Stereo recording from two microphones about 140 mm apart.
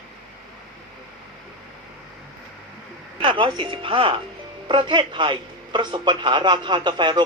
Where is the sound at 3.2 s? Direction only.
35° right (ahead or behind).